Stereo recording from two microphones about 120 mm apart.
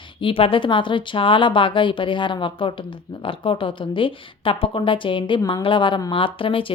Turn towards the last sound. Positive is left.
turn(degrees=45)  # may be behind; listen again after turning